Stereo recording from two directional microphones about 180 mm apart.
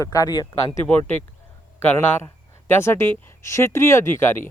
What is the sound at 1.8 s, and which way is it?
Speech, 10° left (ahead or behind).